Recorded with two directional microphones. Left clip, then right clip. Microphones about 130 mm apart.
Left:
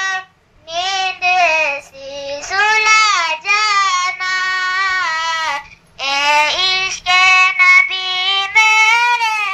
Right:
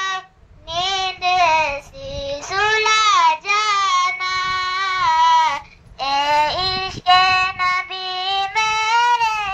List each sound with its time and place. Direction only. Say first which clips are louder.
0.7 s child singing: left 3 dB; 5° right (ahead or behind)
5.9 s child singing: left 3 dB; 30° right (ahead or behind)